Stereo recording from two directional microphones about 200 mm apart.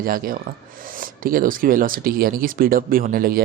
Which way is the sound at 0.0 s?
45° right (ahead or behind).